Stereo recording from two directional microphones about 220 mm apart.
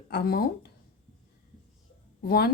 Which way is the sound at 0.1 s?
45° left (ahead or behind).